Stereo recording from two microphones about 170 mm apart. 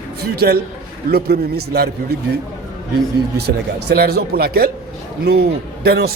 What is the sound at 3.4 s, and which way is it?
A man's voice, 70° right (ahead or behind).